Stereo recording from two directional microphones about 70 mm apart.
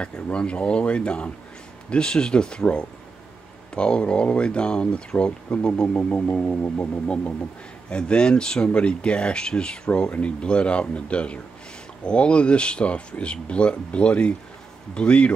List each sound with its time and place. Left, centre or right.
0.0 s speech: centre